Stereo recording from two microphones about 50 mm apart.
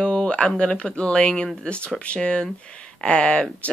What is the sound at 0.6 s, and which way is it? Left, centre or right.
Speech, left.